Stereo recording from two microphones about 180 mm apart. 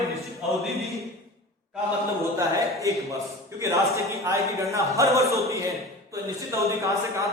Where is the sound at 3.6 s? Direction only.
15° right (ahead or behind).